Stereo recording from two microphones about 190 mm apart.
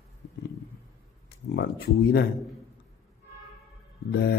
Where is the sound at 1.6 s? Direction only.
60° left (ahead or behind).